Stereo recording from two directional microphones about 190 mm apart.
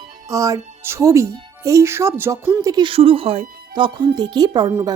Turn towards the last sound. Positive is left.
turn(degrees=-20)  # may be behind; listen again after turning